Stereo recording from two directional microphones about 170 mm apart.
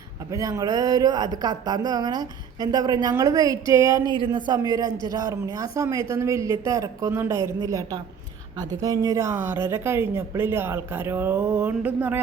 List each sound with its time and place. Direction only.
0.3 s a woman's voice: 20° right (ahead or behind)